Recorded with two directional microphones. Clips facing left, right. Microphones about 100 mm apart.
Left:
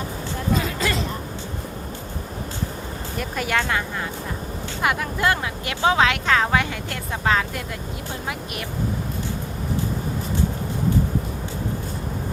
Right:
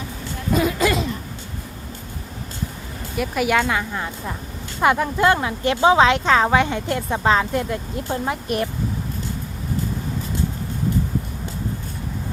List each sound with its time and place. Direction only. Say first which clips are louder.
0.5 s a sound: right 6 dB; 15° right (ahead or behind)
3.2 s a woman's voice: right 5 dB; 10° right (ahead or behind)
4.8 s speech: right 5 dB; 25° right (ahead or behind)
8.3 s speech: right 7 dB; 35° right (ahead or behind)